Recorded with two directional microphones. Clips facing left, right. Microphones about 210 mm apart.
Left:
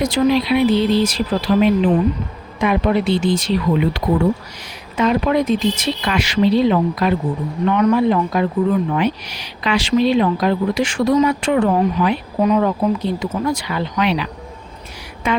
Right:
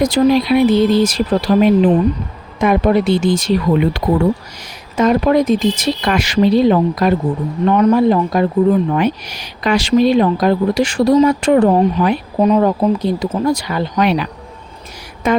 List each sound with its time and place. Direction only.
0.0 s speech: 45° right (ahead or behind)